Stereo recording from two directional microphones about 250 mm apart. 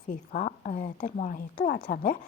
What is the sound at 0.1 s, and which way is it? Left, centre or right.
A woman's voice, left.